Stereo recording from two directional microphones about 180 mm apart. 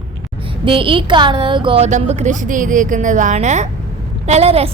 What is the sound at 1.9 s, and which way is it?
A woman's voice, 40° right (ahead or behind).